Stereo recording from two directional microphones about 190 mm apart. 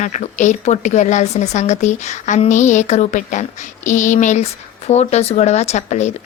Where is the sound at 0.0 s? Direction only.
40° left (ahead or behind).